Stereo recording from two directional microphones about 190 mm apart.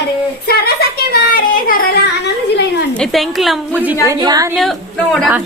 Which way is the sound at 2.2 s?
65° left (ahead or behind).